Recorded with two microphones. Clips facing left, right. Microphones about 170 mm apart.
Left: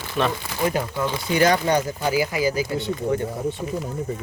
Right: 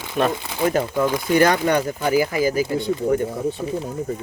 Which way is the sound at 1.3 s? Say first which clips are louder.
Right 1 dB; 60° right (ahead or behind).